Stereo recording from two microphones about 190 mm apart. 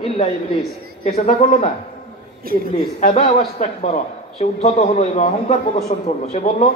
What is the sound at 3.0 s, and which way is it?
A man's voice, 35° left (ahead or behind).